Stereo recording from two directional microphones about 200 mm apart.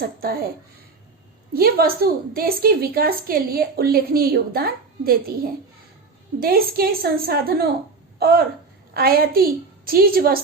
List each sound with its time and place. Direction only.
0.2 s a woman's voice: 50° right (ahead or behind)
1.5 s a woman's voice: 50° right (ahead or behind)